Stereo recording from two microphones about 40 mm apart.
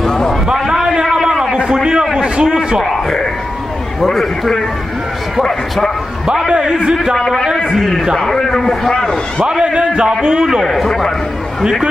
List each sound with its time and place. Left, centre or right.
0.0 s a sound: centre
0.5 s a sound: centre
4.0 s a man's voice: centre
6.2 s a man's voice: centre
7.2 s a man's voice: centre
9.5 s a man's voice: right
10.6 s a man's voice: centre